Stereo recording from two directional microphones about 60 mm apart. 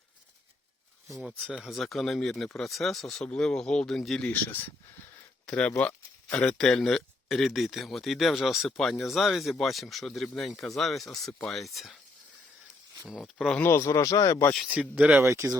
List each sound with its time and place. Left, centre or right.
1.6 s speech: centre
4.3 s speech: left
5.5 s speech: left
6.3 s speech: centre
13.1 s speech: centre
13.6 s speech: left
14.7 s speech: centre
15.2 s speech: right